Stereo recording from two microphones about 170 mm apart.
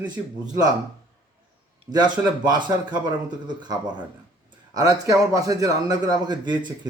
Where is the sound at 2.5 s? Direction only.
25° right (ahead or behind).